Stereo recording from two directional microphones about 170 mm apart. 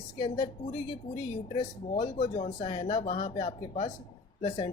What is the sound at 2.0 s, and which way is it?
Speech, 35° left (ahead or behind).